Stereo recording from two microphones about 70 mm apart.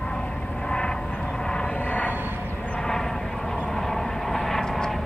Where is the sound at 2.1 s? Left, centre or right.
Right.